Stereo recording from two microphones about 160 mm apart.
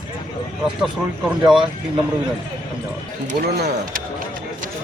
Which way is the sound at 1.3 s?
5° right (ahead or behind).